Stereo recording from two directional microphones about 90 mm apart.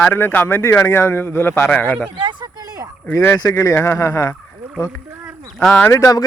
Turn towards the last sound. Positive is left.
turn(degrees=35)  # may be behind; listen again after turning